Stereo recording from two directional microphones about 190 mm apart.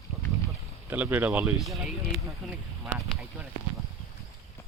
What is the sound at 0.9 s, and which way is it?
Speech, 10° right (ahead or behind).